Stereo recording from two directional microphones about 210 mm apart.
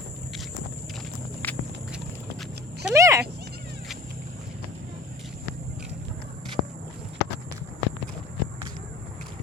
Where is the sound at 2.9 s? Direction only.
15° right (ahead or behind).